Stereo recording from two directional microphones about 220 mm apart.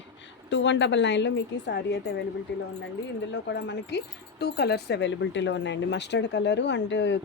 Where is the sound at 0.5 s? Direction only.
55° left (ahead or behind).